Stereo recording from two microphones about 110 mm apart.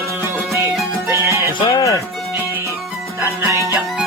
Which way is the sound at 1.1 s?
25° right (ahead or behind).